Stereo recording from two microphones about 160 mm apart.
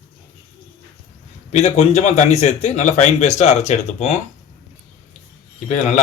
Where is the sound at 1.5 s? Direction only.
45° left (ahead or behind).